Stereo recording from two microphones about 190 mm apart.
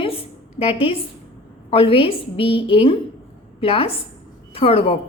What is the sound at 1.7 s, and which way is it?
A woman's voice, 30° left (ahead or behind).